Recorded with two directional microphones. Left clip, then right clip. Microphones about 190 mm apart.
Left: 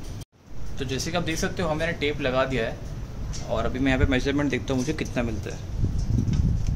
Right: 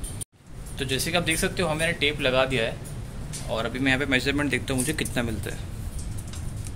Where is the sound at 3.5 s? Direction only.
15° left (ahead or behind).